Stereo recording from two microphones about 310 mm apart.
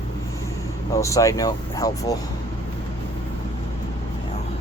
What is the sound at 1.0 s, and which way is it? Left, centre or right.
Speech, centre.